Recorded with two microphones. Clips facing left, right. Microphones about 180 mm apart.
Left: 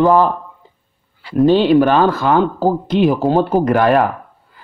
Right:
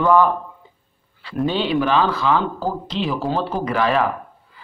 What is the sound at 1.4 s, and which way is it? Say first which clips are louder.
A man's voice: left 9 dB; 40° left (ahead or behind).